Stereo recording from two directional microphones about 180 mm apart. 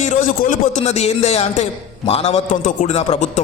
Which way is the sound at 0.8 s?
35° left (ahead or behind).